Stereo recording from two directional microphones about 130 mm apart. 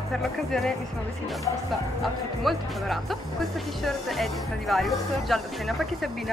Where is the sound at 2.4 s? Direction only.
Centre (ahead or behind).